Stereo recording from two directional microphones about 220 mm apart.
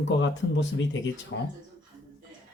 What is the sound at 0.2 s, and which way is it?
Speech, 55° left (ahead or behind).